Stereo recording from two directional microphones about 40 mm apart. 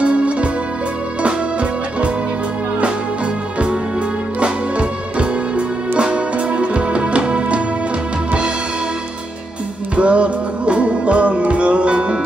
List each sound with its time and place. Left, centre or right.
0.0 s music: right
4.4 s music: right
9.9 s music: right